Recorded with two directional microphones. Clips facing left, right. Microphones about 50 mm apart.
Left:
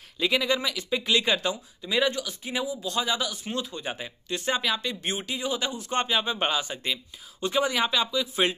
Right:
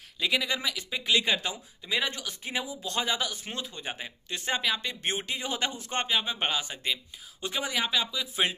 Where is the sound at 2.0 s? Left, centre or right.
Right.